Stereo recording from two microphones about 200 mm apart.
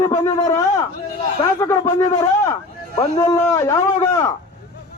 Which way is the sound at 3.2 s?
15° left (ahead or behind).